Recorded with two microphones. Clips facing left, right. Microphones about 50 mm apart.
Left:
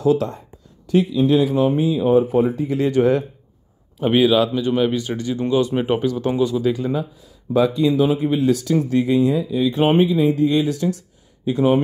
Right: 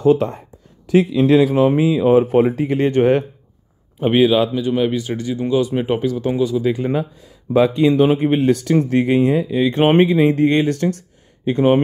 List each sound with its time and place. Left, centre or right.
0.0 s speech: right
0.8 s speech: right
2.7 s speech: right
4.0 s speech: centre
6.9 s speech: right